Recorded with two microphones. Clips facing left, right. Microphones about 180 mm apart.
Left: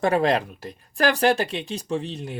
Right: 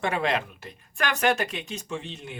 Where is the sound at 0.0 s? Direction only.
40° left (ahead or behind).